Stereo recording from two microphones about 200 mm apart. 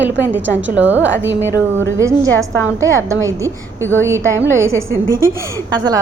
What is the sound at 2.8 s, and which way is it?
A woman's voice, 15° right (ahead or behind).